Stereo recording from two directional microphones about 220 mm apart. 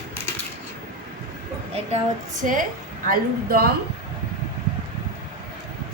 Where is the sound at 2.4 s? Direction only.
35° right (ahead or behind).